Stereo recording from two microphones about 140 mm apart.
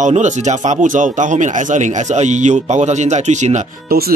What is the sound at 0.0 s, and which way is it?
Speech, 60° right (ahead or behind).